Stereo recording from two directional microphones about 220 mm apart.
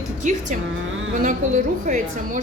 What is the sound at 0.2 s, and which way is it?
A woman's voice, 35° right (ahead or behind).